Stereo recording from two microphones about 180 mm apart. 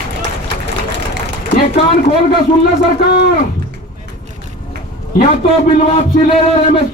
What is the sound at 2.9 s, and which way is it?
Speech, 65° left (ahead or behind).